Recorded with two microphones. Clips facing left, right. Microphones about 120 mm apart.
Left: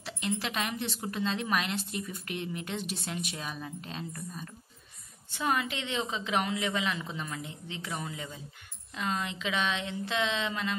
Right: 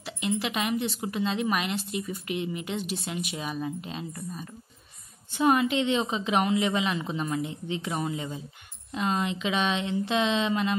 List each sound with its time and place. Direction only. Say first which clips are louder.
0.0 s speech: right 4 dB; 5° right (ahead or behind)
5.4 s a woman's voice: right 8 dB; 20° right (ahead or behind)